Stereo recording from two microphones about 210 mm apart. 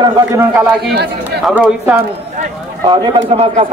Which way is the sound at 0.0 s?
15° right (ahead or behind).